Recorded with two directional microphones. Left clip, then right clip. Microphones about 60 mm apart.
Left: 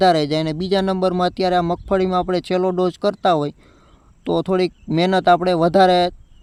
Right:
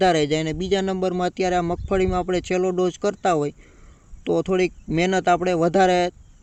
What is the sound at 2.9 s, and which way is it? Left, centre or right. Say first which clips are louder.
Speech: left 4 dB; left.